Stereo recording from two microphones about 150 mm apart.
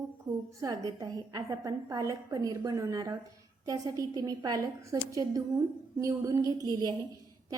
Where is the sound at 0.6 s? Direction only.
20° right (ahead or behind).